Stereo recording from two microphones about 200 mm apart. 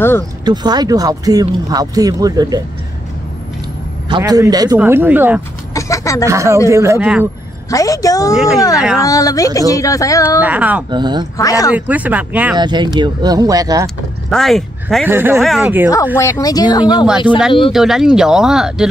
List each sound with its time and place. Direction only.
0.5 s speech: 20° right (ahead or behind)
4.2 s speech: 15° right (ahead or behind)
5.8 s a sound: 15° left (ahead or behind)
6.2 s speech: 15° right (ahead or behind)
7.7 s speech: 15° left (ahead or behind)
10.4 s speech: 5° right (ahead or behind)
10.9 s speech: 20° right (ahead or behind)
11.3 s speech: 15° left (ahead or behind)
11.7 s speech: 5° right (ahead or behind)
12.5 s speech: 20° right (ahead or behind)
14.3 s speech: centre (ahead or behind)
15.0 s speech: 10° right (ahead or behind)
16.2 s speech: 15° left (ahead or behind)
17.3 s speech: 5° left (ahead or behind)